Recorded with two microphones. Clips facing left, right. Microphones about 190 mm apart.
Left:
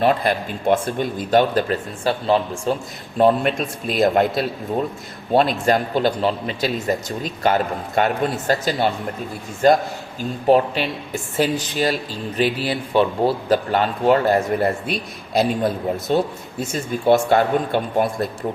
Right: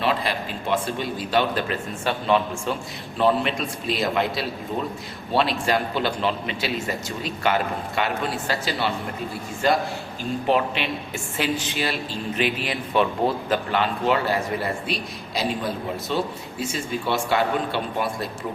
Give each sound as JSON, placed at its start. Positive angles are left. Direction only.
{"t": 0.0, "sound": "a man's voice", "side_deg": 50}
{"t": 3.2, "sound": "a man's voice", "side_deg": 50}